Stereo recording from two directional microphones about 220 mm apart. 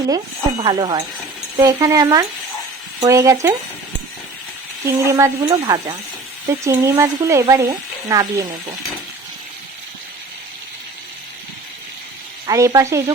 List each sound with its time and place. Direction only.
0.6 s speech: 20° right (ahead or behind)
4.9 s speech: 15° right (ahead or behind)
12.5 s speech: 15° right (ahead or behind)